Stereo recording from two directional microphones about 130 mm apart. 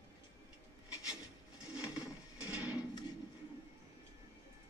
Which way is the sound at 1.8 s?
25° left (ahead or behind).